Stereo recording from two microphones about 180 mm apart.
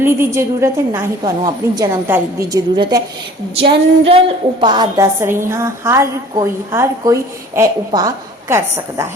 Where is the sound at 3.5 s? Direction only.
30° right (ahead or behind); by 9.1 s 15° right (ahead or behind).